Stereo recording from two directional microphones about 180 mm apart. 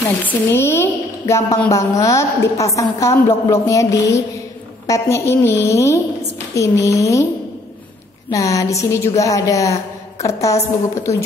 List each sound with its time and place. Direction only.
0.2 s a woman's voice: 10° left (ahead or behind)
8.3 s a woman's voice: 15° left (ahead or behind)